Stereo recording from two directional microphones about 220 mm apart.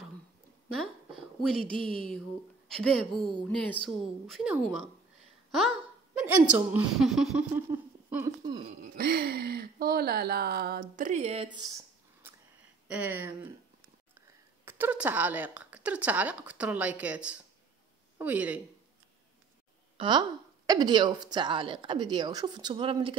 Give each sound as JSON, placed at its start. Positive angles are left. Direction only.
{"t": 1.8, "sound": "a woman's voice", "side_deg": 0}
{"t": 8.5, "sound": "a woman's voice", "side_deg": -30}
{"t": 8.9, "sound": "a woman's voice", "side_deg": -45}
{"t": 14.6, "sound": "a woman's voice", "side_deg": -10}
{"t": 20.0, "sound": "a woman's voice", "side_deg": -20}